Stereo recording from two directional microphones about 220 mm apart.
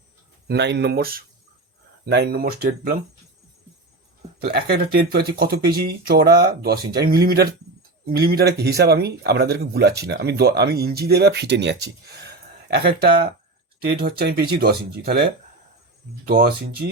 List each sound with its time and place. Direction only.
0.4 s speech: 50° right (ahead or behind)
4.4 s speech: 45° right (ahead or behind)